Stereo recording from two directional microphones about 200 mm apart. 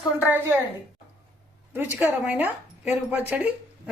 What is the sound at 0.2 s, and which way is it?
Speech, 10° right (ahead or behind).